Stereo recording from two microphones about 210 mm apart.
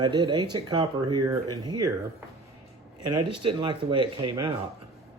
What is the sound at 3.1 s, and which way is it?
A man's voice, 20° right (ahead or behind).